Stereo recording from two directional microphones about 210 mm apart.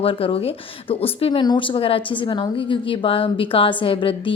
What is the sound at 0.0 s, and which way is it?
Speech, 25° left (ahead or behind).